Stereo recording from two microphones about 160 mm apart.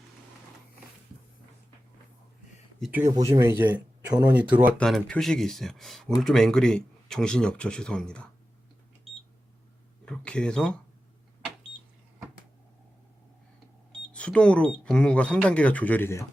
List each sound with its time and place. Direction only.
3.1 s speech: 30° right (ahead or behind)
4.1 s speech: 10° right (ahead or behind)
4.8 s speech: 5° left (ahead or behind)
10.1 s speech: 5° left (ahead or behind)
14.1 s speech: 5° left (ahead or behind)